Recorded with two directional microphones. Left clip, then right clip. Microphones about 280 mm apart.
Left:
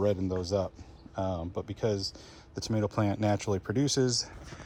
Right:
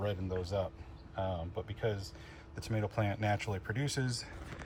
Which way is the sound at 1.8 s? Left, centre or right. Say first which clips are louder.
Left 7 dB; left.